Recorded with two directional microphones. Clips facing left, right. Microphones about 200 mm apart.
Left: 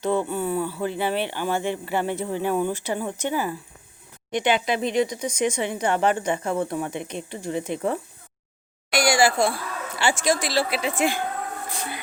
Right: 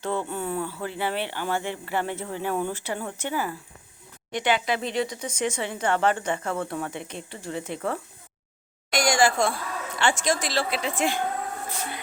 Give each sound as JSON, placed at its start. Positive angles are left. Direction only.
{"t": 0.0, "sound": "speech", "side_deg": 15}